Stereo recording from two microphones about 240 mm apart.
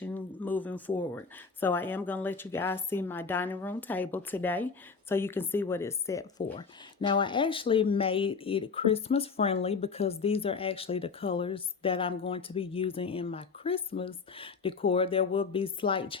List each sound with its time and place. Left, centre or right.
0.0 s a woman's voice: centre